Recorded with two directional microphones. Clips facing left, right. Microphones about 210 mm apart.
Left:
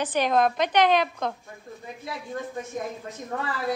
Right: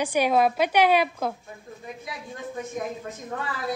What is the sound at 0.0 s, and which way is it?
A woman's voice, 10° right (ahead or behind).